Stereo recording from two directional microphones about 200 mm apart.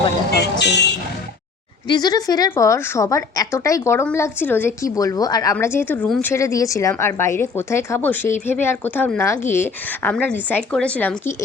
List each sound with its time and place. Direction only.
0.3 s vehicle: 55° left (ahead or behind)
1.9 s a woman's voice: 20° left (ahead or behind); by 6.3 s 5° left (ahead or behind)
6.3 s a woman's voice: 15° left (ahead or behind)